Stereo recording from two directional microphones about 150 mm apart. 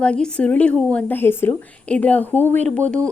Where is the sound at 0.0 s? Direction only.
5° left (ahead or behind).